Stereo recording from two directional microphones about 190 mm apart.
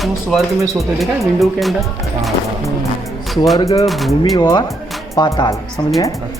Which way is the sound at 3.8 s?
Centre (ahead or behind).